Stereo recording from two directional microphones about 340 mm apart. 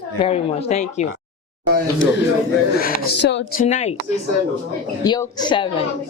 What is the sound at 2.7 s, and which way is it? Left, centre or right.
Speech, left.